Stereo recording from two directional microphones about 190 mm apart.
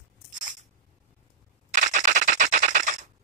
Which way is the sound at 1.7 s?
40° right (ahead or behind).